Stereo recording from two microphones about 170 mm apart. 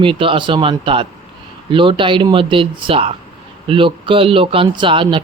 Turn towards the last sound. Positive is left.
turn(degrees=-30)  # may be behind; listen again after turning